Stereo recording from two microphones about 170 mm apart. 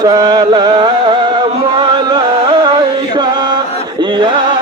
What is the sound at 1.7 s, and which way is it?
Music, 25° right (ahead or behind).